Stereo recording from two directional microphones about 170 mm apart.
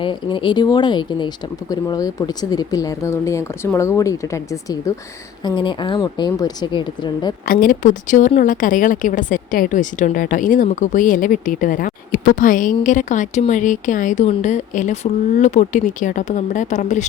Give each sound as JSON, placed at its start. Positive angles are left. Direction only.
{"t": 0.0, "sound": "speech", "side_deg": 30}
{"t": 7.4, "sound": "a woman's voice", "side_deg": 55}